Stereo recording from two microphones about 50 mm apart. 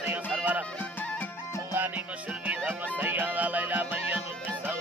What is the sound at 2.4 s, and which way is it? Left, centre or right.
Music, right.